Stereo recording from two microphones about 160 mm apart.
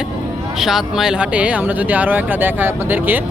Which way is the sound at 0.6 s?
Centre (ahead or behind).